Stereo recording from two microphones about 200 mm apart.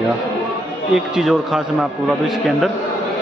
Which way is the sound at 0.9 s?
Centre (ahead or behind).